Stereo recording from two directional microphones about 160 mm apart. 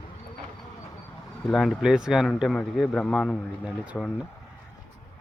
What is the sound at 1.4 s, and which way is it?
Speech, centre (ahead or behind).